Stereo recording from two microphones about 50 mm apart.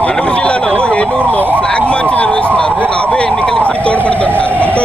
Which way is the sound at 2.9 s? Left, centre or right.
Left.